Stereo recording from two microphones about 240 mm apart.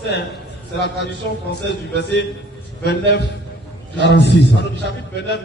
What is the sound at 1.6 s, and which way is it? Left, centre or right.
A man's voice, left.